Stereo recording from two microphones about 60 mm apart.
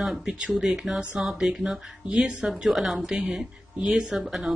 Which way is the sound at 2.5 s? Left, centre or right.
Centre.